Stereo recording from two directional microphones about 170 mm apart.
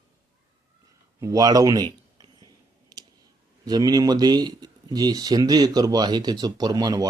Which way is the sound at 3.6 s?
25° right (ahead or behind).